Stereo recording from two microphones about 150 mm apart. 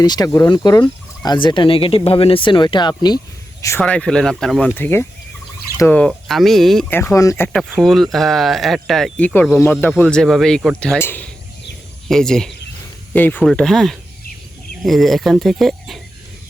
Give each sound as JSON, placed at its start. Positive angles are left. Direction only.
{"t": 0.0, "sound": "speech", "side_deg": 25}
{"t": 3.6, "sound": "speech", "side_deg": 20}
{"t": 3.8, "sound": "speech", "side_deg": 5}
{"t": 6.1, "sound": "speech", "side_deg": 0}
{"t": 6.9, "sound": "speech", "side_deg": 20}
{"t": 7.8, "sound": "speech", "side_deg": 0}